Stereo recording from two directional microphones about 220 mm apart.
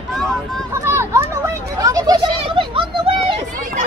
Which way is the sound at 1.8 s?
15° right (ahead or behind).